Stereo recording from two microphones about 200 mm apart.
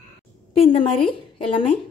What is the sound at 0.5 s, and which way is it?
A woman's voice, 30° left (ahead or behind).